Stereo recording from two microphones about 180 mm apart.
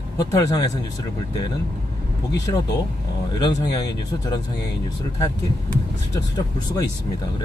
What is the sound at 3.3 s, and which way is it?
Speech, 20° left (ahead or behind).